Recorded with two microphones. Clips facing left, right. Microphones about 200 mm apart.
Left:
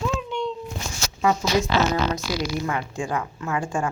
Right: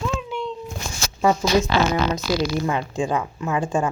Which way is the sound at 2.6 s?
20° right (ahead or behind).